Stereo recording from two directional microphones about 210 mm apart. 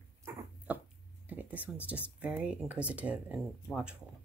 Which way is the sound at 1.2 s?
10° right (ahead or behind).